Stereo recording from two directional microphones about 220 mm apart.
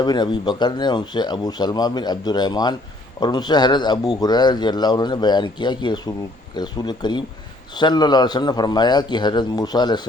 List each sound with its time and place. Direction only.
0.0 s speech: 20° left (ahead or behind)